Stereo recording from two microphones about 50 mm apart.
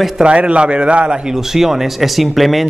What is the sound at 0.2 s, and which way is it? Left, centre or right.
A man's voice, right.